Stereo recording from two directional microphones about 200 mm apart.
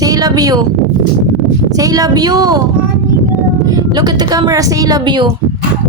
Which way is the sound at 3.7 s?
20° right (ahead or behind).